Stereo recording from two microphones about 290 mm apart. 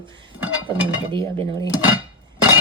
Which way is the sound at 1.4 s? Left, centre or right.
Centre.